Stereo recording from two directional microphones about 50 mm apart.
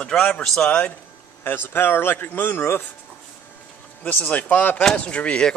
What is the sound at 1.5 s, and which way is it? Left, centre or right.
Speech, left.